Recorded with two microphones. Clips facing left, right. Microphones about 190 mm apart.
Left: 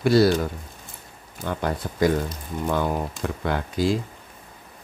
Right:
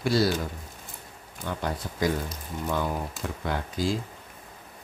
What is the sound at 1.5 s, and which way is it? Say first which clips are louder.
Speech: left 5 dB; 60° left (ahead or behind).